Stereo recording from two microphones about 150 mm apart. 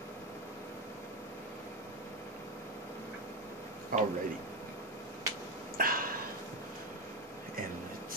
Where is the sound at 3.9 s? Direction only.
65° right (ahead or behind).